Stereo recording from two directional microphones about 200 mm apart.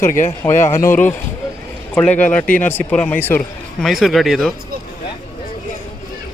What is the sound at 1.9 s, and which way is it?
A man's voice, 5° left (ahead or behind).